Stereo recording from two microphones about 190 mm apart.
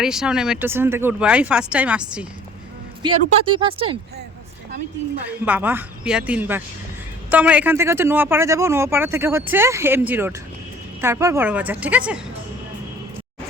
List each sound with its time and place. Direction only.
0.0 s speech: 5° right (ahead or behind)
3.0 s speech: 25° right (ahead or behind)
5.5 s speech: 10° right (ahead or behind)